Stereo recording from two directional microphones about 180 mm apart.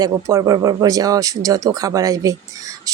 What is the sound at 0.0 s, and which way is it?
A woman's voice, 15° right (ahead or behind).